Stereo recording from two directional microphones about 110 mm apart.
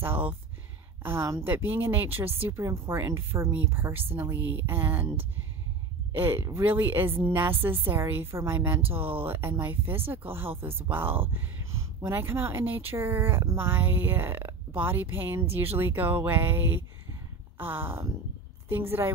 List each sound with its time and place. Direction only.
0.0 s a sound: 15° right (ahead or behind)
1.0 s speech: 20° right (ahead or behind)
17.6 s speech: 20° right (ahead or behind)